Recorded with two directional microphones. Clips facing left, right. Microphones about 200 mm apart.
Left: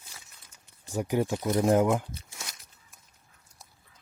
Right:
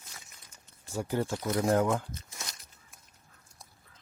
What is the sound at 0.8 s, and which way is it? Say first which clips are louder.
Speech: left 4 dB; 15° left (ahead or behind).